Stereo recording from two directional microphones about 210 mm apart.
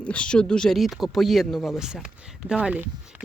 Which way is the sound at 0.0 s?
5° left (ahead or behind).